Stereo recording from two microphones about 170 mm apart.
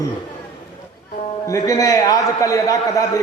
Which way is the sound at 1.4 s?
20° left (ahead or behind).